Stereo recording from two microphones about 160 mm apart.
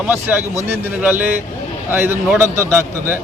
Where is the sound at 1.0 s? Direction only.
10° right (ahead or behind).